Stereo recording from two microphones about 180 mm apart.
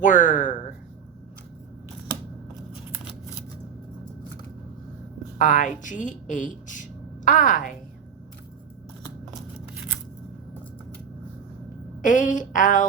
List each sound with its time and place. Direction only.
0.0 s a woman's voice: 45° left (ahead or behind)
5.4 s a woman's voice: 45° left (ahead or behind)
12.0 s a woman's voice: 45° left (ahead or behind)